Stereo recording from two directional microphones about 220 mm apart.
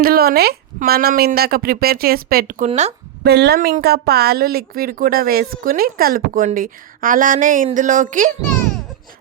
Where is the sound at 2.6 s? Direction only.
30° right (ahead or behind).